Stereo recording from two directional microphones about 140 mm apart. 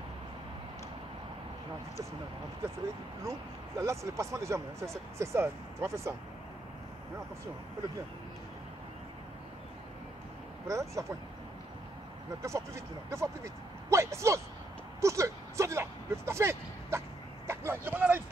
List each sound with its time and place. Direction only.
3.3 s speech: 20° right (ahead or behind)
10.7 s speech: 20° right (ahead or behind)
12.4 s speech: 20° right (ahead or behind)
17.5 s vehicle: 15° right (ahead or behind)